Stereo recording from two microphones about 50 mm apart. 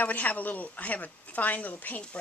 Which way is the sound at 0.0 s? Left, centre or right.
Left.